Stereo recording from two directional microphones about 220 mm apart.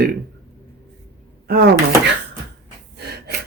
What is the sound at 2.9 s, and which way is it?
Gasp, 45° right (ahead or behind).